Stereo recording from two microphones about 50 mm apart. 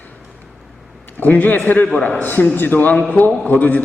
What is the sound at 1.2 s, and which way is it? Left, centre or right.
A man's voice, left.